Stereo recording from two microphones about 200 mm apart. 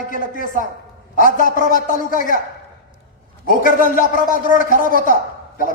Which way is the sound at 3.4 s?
45° left (ahead or behind).